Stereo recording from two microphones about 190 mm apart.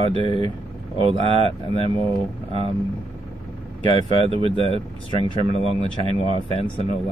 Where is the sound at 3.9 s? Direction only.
30° right (ahead or behind).